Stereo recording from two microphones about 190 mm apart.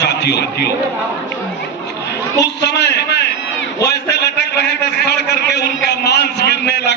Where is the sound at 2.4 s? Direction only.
65° left (ahead or behind).